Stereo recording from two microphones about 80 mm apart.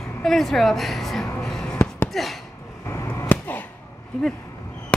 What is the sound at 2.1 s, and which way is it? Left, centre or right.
Speech, centre.